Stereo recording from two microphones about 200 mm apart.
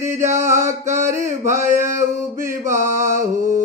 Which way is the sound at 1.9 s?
15° right (ahead or behind).